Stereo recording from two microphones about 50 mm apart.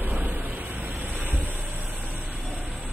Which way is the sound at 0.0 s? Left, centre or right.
Right.